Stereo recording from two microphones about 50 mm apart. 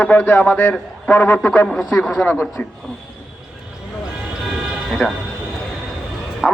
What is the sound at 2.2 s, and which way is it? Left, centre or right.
Speech, left.